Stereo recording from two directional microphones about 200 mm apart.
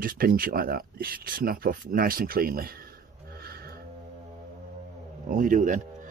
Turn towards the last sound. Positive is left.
turn(degrees=-40)  # may be behind; listen again after turning